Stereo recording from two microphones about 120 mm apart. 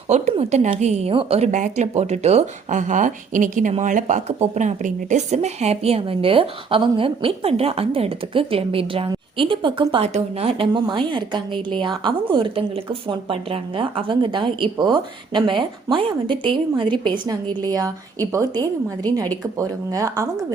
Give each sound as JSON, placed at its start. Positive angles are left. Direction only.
{"t": 0.1, "sound": "a woman's voice", "side_deg": -70}
{"t": 1.1, "sound": "a woman's voice", "side_deg": -55}
{"t": 1.5, "sound": "a woman's voice", "side_deg": -85}
{"t": 10.7, "sound": "speech", "side_deg": -40}